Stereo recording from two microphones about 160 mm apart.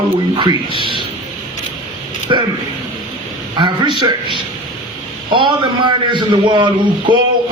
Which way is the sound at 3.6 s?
30° right (ahead or behind).